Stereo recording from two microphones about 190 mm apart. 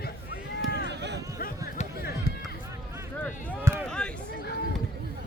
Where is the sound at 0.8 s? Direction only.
65° right (ahead or behind).